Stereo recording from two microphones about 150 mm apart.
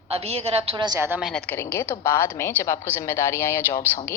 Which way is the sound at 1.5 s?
15° left (ahead or behind).